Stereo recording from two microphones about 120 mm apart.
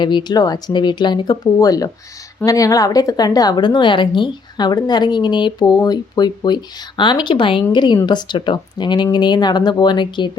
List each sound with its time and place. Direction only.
0.0 s a woman's voice: 40° left (ahead or behind)